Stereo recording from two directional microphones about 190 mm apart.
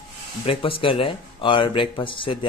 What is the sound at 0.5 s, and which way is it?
Speech, 30° left (ahead or behind).